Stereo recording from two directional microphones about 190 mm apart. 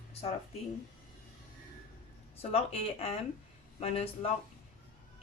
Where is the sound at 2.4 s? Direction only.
30° left (ahead or behind).